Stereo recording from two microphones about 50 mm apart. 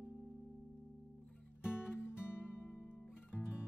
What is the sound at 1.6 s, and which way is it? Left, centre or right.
Music, left.